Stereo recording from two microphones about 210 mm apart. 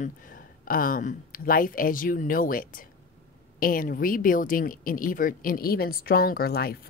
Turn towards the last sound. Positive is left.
turn(degrees=45)  # may be behind; listen again after turning